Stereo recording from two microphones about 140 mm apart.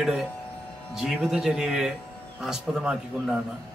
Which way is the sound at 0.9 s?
5° right (ahead or behind).